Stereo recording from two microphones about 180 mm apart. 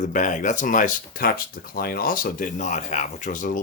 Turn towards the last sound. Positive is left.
turn(degrees=45)  # may be behind; listen again after turning